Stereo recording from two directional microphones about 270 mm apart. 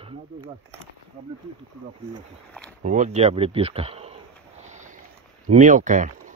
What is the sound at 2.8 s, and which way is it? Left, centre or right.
Speech, right.